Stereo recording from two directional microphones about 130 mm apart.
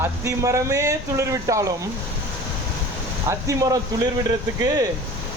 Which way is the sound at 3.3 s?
25° right (ahead or behind).